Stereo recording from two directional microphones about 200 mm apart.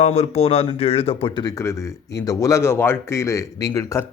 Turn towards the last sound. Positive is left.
turn(degrees=15)  # may be behind; listen again after turning